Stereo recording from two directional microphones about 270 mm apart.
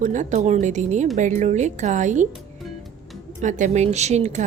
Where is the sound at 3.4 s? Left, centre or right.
Right.